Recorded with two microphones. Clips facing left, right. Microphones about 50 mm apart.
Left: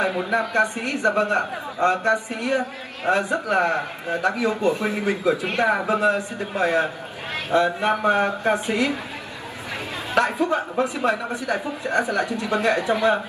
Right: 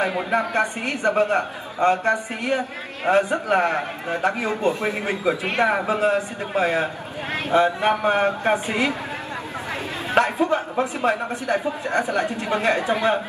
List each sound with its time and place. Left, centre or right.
0.0 s a man's voice: right
10.1 s a man's voice: right